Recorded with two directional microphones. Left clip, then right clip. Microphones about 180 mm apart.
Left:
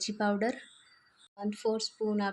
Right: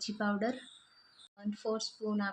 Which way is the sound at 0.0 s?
15° left (ahead or behind).